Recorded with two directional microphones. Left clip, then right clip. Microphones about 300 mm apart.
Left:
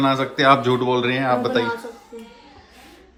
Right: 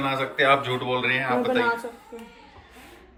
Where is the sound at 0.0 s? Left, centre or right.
Centre.